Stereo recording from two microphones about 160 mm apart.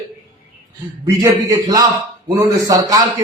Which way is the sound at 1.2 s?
20° right (ahead or behind).